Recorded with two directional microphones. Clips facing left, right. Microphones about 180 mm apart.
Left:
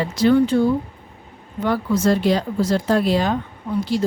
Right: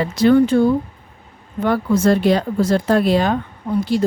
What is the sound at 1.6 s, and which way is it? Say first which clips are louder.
A woman's voice: right 3 dB; 55° right (ahead or behind).